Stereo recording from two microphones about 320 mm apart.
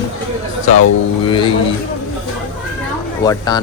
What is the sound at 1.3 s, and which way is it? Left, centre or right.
Speech, centre.